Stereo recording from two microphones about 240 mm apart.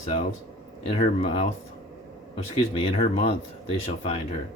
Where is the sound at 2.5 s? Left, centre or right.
Left.